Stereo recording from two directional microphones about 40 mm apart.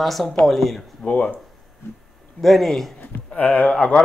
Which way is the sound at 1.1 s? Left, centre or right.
Left.